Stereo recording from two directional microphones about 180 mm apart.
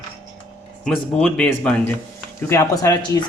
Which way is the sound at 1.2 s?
5° left (ahead or behind).